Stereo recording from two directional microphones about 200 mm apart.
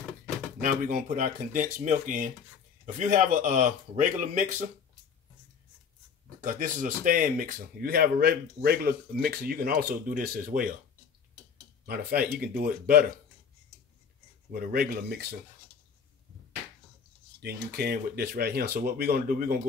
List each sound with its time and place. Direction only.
0.6 s speech: 40° right (ahead or behind)
6.4 s speech: 40° right (ahead or behind)
11.8 s speech: 45° right (ahead or behind)
14.5 s speech: 45° right (ahead or behind)
17.4 s speech: 50° right (ahead or behind)